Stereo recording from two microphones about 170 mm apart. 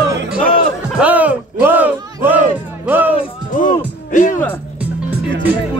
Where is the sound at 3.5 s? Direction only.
50° left (ahead or behind).